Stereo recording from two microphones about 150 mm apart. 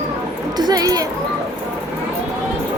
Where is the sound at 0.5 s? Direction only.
25° right (ahead or behind).